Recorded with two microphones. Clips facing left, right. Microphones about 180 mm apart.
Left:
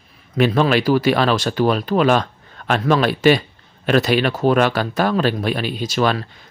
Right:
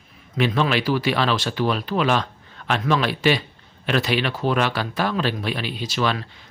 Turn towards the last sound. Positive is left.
turn(degrees=45)  # may be behind; listen again after turning